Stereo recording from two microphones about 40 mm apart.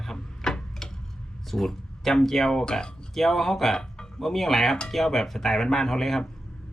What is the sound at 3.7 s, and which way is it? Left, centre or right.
Music, centre.